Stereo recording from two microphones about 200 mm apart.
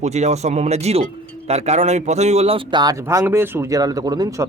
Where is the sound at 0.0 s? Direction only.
35° right (ahead or behind).